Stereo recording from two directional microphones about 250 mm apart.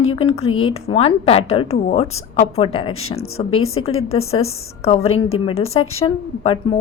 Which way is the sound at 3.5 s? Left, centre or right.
Left.